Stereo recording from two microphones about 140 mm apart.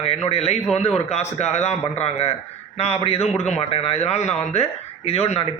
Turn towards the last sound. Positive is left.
turn(degrees=50)  # may be behind; listen again after turning